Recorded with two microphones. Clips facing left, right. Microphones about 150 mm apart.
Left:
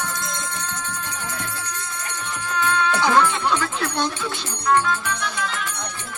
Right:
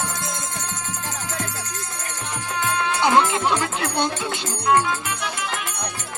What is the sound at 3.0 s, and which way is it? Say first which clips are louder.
Music: right 2 dB; 20° right (ahead or behind).